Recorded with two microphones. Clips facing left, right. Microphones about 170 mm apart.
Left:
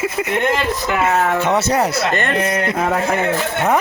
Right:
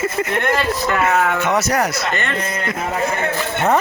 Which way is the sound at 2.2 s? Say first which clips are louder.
Left 5 dB; 65° left (ahead or behind).